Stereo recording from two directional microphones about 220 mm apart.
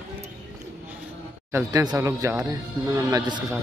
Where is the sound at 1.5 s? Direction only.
15° right (ahead or behind).